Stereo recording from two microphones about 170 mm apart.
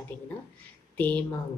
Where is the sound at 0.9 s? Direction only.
10° left (ahead or behind).